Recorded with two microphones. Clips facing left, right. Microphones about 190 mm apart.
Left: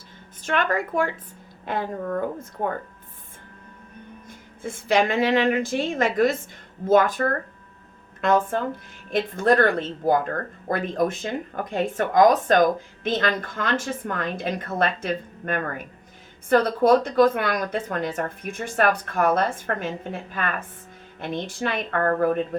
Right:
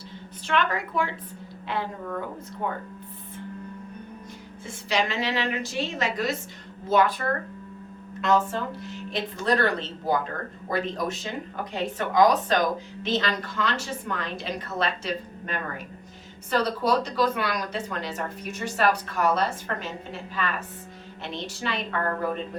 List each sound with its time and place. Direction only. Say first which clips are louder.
0.4 s speech: left 2 dB; 50° left (ahead or behind)
4.6 s speech: left 6 dB; 50° left (ahead or behind)